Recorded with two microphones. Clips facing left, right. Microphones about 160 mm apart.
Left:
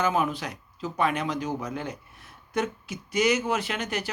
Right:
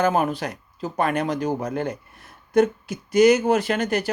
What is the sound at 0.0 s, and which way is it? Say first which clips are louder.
Speech: right 5 dB; 50° right (ahead or behind).